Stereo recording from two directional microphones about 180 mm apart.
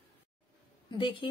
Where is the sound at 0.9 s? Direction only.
30° left (ahead or behind).